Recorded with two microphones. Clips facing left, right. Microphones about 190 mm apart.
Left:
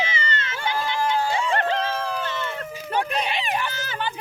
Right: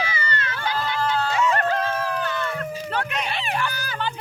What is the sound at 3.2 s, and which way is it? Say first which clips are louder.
Snicker: even; 15° left (ahead or behind).